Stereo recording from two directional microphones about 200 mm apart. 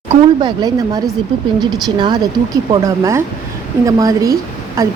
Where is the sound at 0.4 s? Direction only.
20° right (ahead or behind).